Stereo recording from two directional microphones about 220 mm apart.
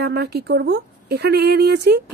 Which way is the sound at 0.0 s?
45° right (ahead or behind).